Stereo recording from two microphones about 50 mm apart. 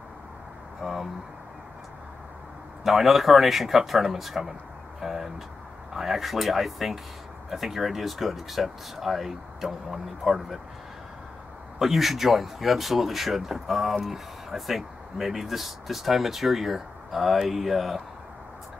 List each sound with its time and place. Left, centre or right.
0.8 s speech: centre
2.8 s speech: centre
5.0 s a sound: centre
5.9 s speech: centre
11.8 s speech: centre